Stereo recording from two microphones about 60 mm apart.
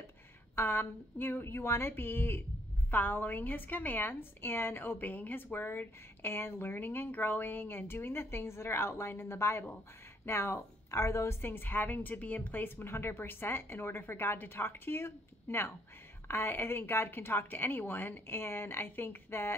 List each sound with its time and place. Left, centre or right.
0.6 s a woman's voice: left
11.4 s a woman's voice: left